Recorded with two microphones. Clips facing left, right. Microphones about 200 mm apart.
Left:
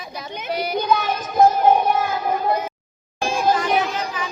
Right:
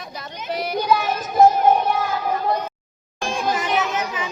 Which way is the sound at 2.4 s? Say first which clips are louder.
Left 1 dB; 5° left (ahead or behind).